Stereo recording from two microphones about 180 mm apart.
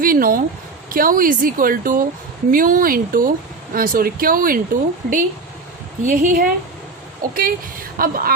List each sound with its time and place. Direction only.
0.0 s speech: 50° right (ahead or behind)